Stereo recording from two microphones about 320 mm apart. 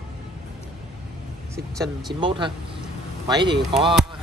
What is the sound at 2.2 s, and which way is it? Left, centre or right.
Speech, centre.